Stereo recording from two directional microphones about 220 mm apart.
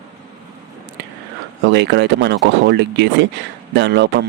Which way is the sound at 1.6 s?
50° right (ahead or behind).